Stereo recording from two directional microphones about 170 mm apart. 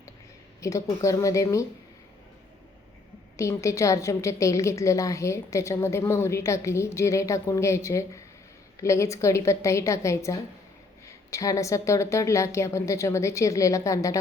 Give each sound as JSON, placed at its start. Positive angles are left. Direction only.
{"t": 0.6, "sound": "a woman's voice", "side_deg": 20}
{"t": 3.3, "sound": "a woman's voice", "side_deg": 15}